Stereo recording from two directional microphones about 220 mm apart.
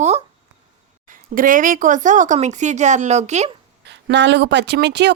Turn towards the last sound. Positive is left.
turn(degrees=-50)  # may be behind; listen again after turning